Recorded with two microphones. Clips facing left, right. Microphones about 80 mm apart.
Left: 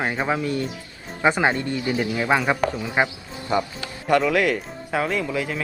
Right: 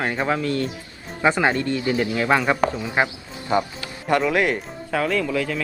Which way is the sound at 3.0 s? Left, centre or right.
Right.